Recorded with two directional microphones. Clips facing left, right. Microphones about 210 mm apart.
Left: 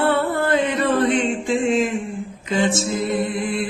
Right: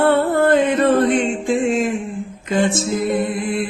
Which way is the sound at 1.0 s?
50° right (ahead or behind).